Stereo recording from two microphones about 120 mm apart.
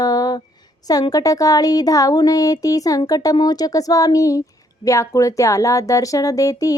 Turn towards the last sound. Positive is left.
turn(degrees=30)  # may be behind; listen again after turning